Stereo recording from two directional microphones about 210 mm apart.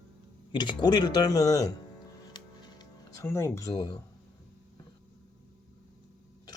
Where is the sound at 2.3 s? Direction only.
20° left (ahead or behind).